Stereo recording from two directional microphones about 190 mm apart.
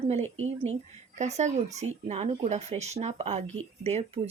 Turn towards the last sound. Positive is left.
turn(degrees=-35)  # may be behind; listen again after turning